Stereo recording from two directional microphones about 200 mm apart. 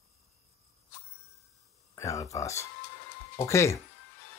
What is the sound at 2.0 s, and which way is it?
Speech, 15° left (ahead or behind).